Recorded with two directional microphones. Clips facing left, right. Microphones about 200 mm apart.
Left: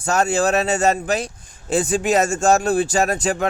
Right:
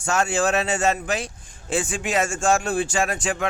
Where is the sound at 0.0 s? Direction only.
40° left (ahead or behind).